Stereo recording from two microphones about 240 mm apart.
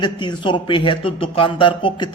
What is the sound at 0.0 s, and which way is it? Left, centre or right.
Speech, centre.